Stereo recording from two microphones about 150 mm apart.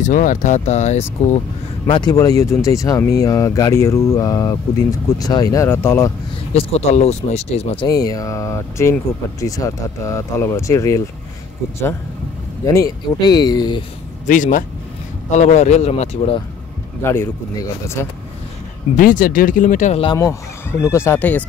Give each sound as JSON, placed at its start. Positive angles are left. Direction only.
{"t": 0.0, "sound": "speech", "side_deg": 60}
{"t": 1.9, "sound": "speech", "side_deg": 30}
{"t": 6.5, "sound": "speech", "side_deg": 45}
{"t": 7.8, "sound": "speech", "side_deg": 25}
{"t": 12.6, "sound": "speech", "side_deg": 20}
{"t": 14.2, "sound": "speech", "side_deg": 60}
{"t": 17.0, "sound": "speech", "side_deg": 15}
{"t": 18.9, "sound": "speech", "side_deg": 65}
{"t": 20.8, "sound": "speech", "side_deg": 15}